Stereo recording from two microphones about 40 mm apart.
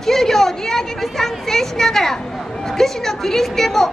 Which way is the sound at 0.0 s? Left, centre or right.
Centre.